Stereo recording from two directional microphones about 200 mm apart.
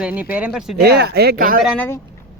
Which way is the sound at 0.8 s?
55° right (ahead or behind).